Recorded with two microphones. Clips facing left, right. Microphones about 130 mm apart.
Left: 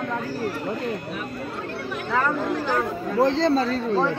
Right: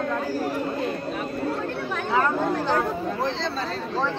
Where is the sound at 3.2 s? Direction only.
45° left (ahead or behind).